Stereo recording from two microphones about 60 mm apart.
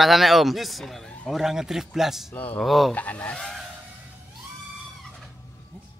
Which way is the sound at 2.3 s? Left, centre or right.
Left.